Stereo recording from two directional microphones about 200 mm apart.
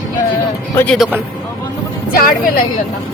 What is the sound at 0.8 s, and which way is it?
Speech, 5° left (ahead or behind).